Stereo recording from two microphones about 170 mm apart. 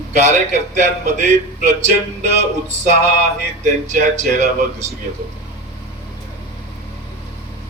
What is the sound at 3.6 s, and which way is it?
Speech, 45° right (ahead or behind).